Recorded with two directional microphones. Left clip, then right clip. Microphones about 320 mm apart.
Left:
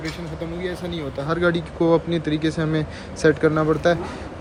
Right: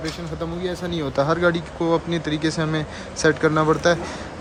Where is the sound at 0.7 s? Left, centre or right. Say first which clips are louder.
Right 4 dB; centre.